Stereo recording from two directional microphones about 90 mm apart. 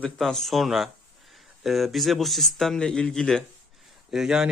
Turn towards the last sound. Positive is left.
turn(degrees=-5)  # may be behind; listen again after turning